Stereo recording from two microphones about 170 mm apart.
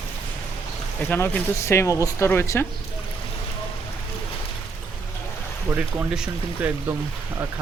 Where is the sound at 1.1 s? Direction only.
15° left (ahead or behind).